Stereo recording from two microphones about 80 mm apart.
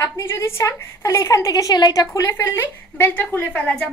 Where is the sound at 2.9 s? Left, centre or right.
Left.